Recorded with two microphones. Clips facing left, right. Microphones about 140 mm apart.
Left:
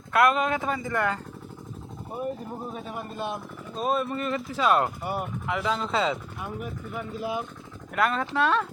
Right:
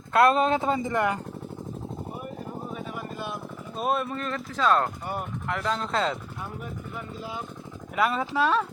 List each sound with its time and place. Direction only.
0.1 s speech: 30° right (ahead or behind)
2.9 s vehicle: 25° left (ahead or behind)
3.8 s speech: centre (ahead or behind)
6.6 s speech: 10° left (ahead or behind)
7.9 s speech: 5° right (ahead or behind)